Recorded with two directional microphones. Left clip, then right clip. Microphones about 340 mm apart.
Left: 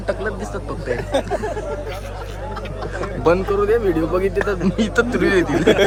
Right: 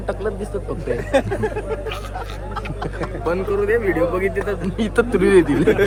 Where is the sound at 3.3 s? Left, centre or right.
Left.